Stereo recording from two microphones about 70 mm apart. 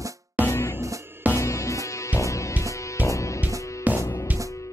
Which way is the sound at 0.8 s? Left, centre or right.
Right.